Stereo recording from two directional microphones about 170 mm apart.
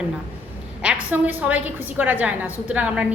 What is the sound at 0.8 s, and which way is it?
A woman's voice, 10° right (ahead or behind).